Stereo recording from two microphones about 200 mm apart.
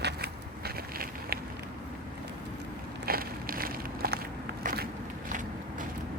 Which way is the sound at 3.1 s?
45° right (ahead or behind).